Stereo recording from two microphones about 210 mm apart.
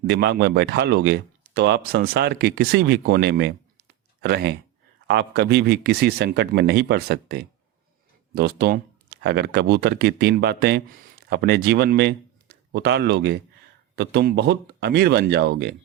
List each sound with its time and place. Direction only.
0.1 s a man's voice: 50° right (ahead or behind)